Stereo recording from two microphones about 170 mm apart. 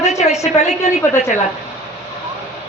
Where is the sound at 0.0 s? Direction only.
40° left (ahead or behind).